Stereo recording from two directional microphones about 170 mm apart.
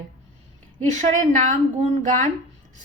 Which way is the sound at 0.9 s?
45° right (ahead or behind).